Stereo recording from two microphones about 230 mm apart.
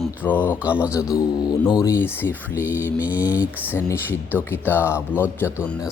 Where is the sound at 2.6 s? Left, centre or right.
Centre.